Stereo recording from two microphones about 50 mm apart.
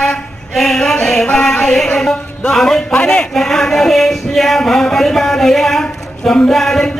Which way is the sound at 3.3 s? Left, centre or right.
Centre.